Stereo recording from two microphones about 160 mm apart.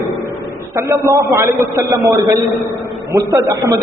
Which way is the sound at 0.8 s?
20° right (ahead or behind).